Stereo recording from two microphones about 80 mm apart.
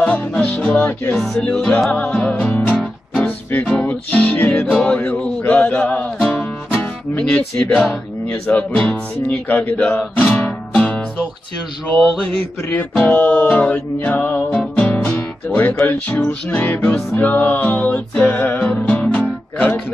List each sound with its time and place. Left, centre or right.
0.0 s music: centre
1.1 s music: centre
6.7 s music: centre
12.0 s music: centre
14.8 s guitar: centre
16.1 s music: left